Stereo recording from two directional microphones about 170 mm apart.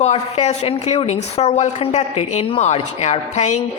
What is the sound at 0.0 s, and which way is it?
Speech, 40° left (ahead or behind).